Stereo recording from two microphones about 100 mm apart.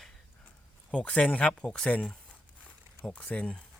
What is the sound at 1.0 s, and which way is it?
Speech, 10° left (ahead or behind).